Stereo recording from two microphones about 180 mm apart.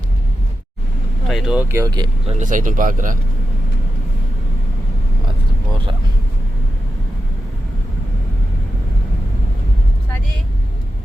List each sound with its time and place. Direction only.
1.3 s speech: 5° right (ahead or behind); by 2.3 s 25° right (ahead or behind)
2.4 s a man's voice: 45° right (ahead or behind)